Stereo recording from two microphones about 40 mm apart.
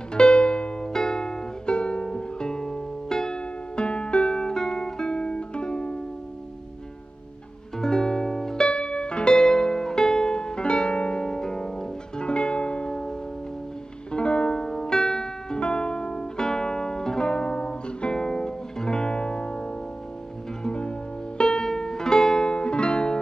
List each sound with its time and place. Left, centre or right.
0.1 s music: left
7.8 s music: centre
8.6 s music: left
12.2 s music: left
14.1 s music: left